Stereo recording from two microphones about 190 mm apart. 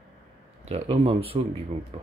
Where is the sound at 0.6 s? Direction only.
35° right (ahead or behind).